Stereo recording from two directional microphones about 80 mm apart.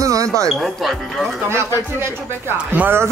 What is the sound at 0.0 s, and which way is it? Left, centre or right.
Music, right.